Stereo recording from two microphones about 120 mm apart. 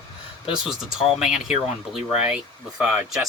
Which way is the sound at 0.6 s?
5° right (ahead or behind).